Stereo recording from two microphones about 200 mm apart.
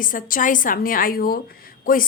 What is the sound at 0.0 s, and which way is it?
A woman's voice, 45° left (ahead or behind).